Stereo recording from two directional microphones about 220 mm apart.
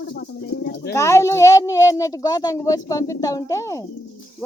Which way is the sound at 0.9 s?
15° left (ahead or behind).